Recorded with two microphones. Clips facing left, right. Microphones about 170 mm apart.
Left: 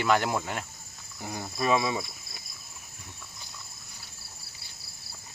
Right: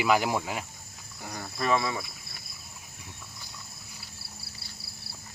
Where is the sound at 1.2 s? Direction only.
15° left (ahead or behind).